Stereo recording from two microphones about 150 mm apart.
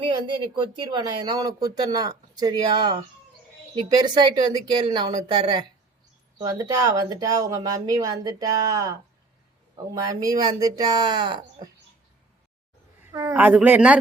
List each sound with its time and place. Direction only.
0.0 s speech: 30° right (ahead or behind)
13.3 s speech: 10° right (ahead or behind)